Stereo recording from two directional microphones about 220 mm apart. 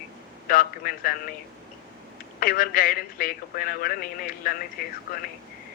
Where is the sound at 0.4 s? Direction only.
40° left (ahead or behind).